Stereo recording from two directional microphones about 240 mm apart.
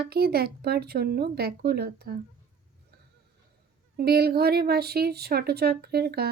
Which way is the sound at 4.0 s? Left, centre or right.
Right.